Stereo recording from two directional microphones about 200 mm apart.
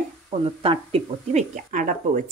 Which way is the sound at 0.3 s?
30° right (ahead or behind).